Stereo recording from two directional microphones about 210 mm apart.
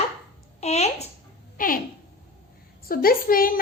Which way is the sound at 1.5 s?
40° left (ahead or behind).